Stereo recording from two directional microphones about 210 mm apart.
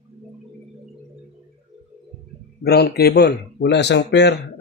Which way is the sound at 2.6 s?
50° left (ahead or behind).